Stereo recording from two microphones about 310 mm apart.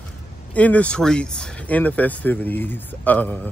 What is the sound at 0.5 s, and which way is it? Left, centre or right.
Speech, centre.